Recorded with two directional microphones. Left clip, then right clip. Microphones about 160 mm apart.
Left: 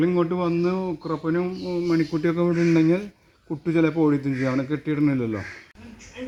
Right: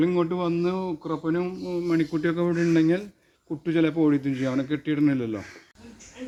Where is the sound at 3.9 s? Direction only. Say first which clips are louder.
Left 1 dB; 25° left (ahead or behind).